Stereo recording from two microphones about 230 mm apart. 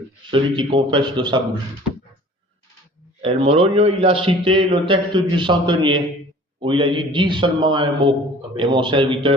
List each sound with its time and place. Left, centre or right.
0.3 s a man's voice: right
3.2 s a man's voice: right